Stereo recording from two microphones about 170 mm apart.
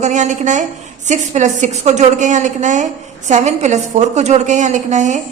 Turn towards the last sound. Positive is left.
turn(degrees=-45)  # may be behind; listen again after turning